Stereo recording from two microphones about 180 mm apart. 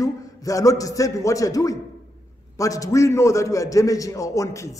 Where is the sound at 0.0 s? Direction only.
20° left (ahead or behind).